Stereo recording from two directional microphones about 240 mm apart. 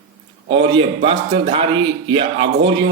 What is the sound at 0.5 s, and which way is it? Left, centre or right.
A man's voice, right.